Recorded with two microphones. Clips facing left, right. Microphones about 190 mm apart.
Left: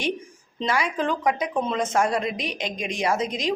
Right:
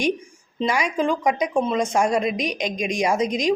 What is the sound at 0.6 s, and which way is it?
Speech, 15° right (ahead or behind).